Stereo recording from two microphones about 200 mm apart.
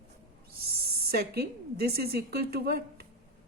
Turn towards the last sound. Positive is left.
turn(degrees=-50)  # may be behind; listen again after turning